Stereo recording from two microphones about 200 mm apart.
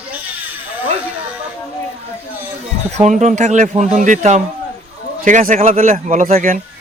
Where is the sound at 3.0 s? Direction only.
35° right (ahead or behind).